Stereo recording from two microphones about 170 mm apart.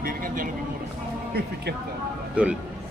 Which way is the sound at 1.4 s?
75° right (ahead or behind).